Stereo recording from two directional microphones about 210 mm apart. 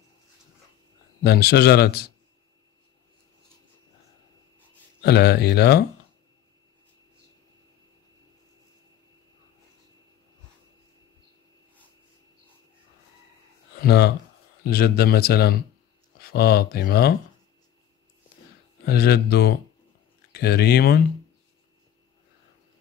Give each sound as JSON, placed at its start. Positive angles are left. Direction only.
{"t": 1.2, "sound": "speech", "side_deg": 50}
{"t": 5.0, "sound": "speech", "side_deg": 50}
{"t": 13.7, "sound": "speech", "side_deg": 50}
{"t": 18.9, "sound": "speech", "side_deg": 45}